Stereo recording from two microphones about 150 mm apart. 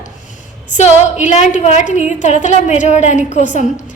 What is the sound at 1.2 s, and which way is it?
A woman's voice, 50° left (ahead or behind).